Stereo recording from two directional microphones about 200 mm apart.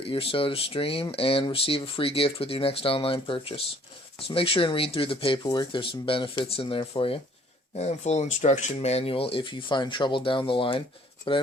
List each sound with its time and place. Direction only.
0.0 s speech: 25° left (ahead or behind)